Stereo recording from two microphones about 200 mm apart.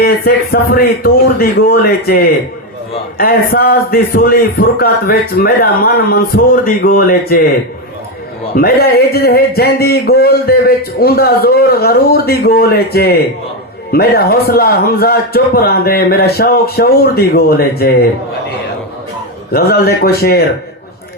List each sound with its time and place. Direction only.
0.0 s a man's voice: 50° left (ahead or behind)
8.5 s a man's voice: 50° left (ahead or behind)
19.5 s a man's voice: 50° left (ahead or behind)